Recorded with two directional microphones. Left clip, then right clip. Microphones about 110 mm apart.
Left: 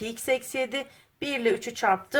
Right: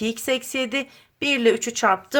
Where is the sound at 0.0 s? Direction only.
40° right (ahead or behind).